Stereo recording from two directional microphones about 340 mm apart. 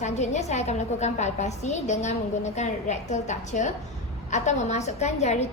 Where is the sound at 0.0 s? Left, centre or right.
Centre.